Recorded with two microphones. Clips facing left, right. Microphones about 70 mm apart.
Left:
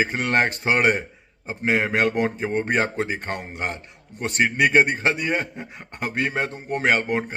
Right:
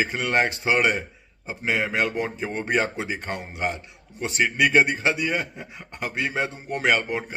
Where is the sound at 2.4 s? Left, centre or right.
Left.